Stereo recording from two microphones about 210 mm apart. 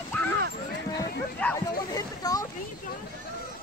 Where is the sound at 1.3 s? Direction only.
5° left (ahead or behind).